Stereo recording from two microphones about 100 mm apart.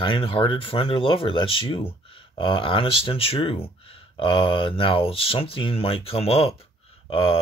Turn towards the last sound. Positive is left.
turn(degrees=65)  # may be behind; listen again after turning